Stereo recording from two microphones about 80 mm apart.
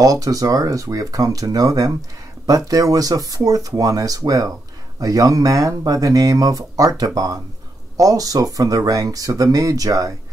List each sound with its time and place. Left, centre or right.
0.0 s speech: right